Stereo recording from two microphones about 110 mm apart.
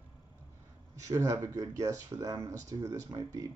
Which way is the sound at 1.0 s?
30° right (ahead or behind).